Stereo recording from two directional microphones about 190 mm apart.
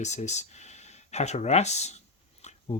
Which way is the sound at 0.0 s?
35° left (ahead or behind).